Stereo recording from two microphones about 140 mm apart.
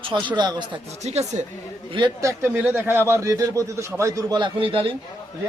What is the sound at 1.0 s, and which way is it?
Speech, 50° right (ahead or behind).